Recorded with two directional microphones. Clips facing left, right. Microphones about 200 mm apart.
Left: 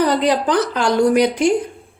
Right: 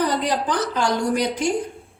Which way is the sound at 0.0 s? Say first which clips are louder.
Left 6 dB; 70° left (ahead or behind).